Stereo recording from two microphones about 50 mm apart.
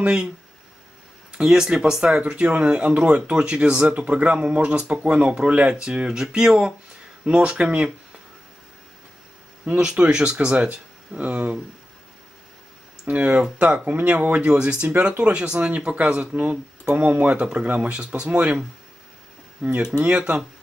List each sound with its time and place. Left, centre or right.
0.0 s speech: centre
1.4 s speech: centre
9.9 s speech: centre
13.1 s speech: right
19.9 s speech: right